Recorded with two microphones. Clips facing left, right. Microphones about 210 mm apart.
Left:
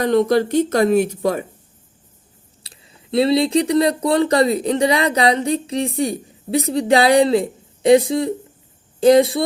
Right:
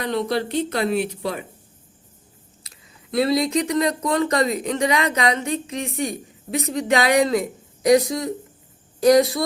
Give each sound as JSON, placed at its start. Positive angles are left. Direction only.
{"t": 0.0, "sound": "speech", "side_deg": 45}
{"t": 2.6, "sound": "speech", "side_deg": 25}